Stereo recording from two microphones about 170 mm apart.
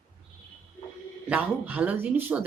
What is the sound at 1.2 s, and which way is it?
Speech, 10° right (ahead or behind).